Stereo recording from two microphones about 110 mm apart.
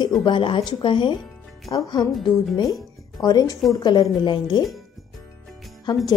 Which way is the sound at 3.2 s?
40° left (ahead or behind).